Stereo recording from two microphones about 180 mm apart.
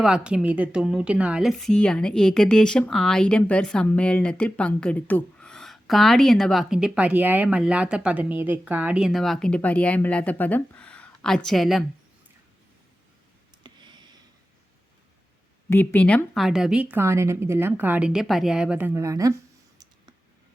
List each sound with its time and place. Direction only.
0.0 s a woman's voice: 5° right (ahead or behind)
13.6 s a sound: 25° right (ahead or behind)
15.7 s a woman's voice: 10° left (ahead or behind); by 19.3 s 20° right (ahead or behind)